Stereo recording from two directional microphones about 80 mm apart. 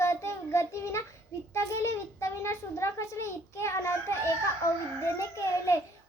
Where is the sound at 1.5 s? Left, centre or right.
Left.